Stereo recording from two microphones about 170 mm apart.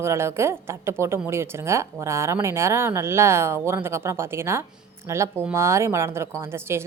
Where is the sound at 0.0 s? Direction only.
15° right (ahead or behind).